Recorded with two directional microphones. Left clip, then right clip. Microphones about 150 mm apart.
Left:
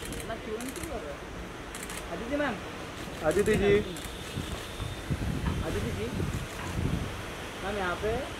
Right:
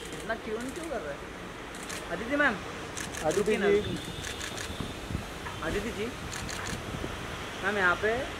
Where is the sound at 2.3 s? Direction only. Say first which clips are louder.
Right 5 dB; 35° right (ahead or behind).